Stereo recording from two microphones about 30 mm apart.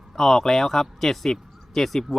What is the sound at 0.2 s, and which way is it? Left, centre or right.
Speech, centre.